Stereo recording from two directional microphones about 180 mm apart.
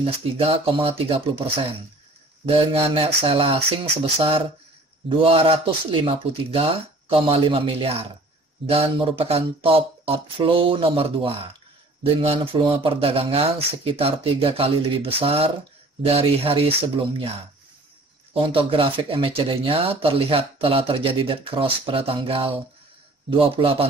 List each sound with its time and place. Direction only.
0.0 s speech: 30° right (ahead or behind)
18.3 s speech: 30° right (ahead or behind)